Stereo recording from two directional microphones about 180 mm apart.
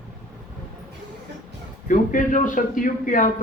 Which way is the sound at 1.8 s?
45° left (ahead or behind).